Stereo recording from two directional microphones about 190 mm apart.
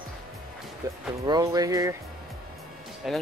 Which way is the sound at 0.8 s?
20° right (ahead or behind).